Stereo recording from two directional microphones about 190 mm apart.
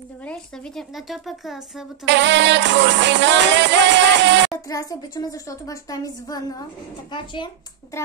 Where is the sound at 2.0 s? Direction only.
65° right (ahead or behind).